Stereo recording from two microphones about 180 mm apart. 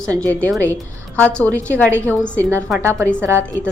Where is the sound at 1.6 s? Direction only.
15° right (ahead or behind).